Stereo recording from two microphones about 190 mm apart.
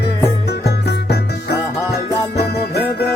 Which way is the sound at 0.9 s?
60° left (ahead or behind).